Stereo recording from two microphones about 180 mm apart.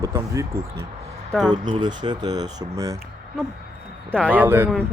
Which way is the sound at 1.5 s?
25° right (ahead or behind).